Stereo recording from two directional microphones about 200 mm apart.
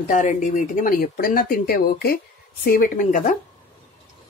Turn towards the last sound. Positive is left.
turn(degrees=40)  # may be behind; listen again after turning